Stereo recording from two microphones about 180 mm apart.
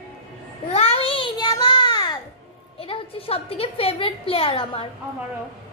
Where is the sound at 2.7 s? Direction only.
30° left (ahead or behind).